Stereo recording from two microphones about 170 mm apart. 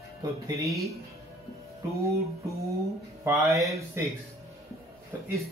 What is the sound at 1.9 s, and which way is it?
Speech, 20° right (ahead or behind).